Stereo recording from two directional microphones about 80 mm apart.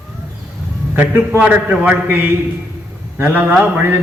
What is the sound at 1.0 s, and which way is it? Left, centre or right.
A man's voice, centre.